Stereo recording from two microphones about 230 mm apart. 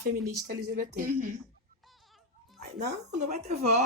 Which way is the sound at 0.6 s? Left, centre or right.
Right.